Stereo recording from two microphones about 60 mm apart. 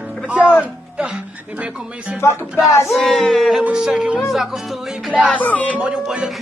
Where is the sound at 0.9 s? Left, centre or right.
Centre.